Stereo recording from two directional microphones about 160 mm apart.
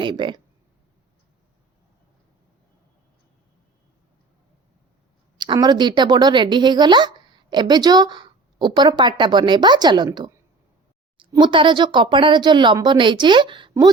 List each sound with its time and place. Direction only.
0.0 s speech: 30° right (ahead or behind)
5.4 s a woman's voice: 25° right (ahead or behind)